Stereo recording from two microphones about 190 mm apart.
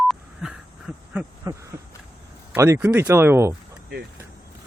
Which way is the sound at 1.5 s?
20° right (ahead or behind).